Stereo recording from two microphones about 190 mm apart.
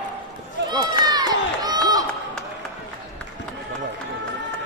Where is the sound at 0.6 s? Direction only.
20° right (ahead or behind).